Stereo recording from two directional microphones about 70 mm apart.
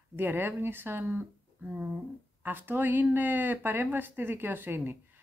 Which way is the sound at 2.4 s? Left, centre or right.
Right.